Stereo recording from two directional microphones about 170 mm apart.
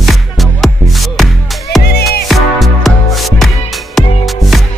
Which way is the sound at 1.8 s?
70° left (ahead or behind).